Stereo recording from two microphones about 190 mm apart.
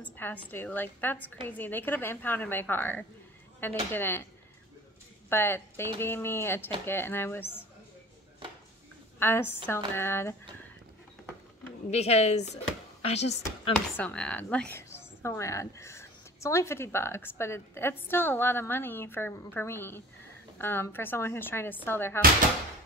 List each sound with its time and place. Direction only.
0.0 s a woman's voice: 10° left (ahead or behind)
5.3 s a woman's voice: 10° left (ahead or behind)
9.2 s a woman's voice: 10° left (ahead or behind)
11.9 s speech: 35° left (ahead or behind)
13.9 s a woman's voice: 5° left (ahead or behind)